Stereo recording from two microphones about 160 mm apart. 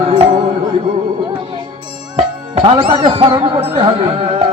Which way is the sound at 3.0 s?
35° right (ahead or behind).